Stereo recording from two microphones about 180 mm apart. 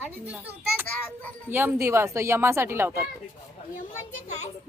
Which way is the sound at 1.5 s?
10° right (ahead or behind).